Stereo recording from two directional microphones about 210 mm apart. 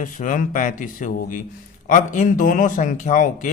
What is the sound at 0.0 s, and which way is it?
Speech, 35° left (ahead or behind).